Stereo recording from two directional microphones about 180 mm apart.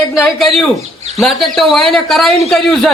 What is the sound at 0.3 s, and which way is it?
A man's voice, centre (ahead or behind).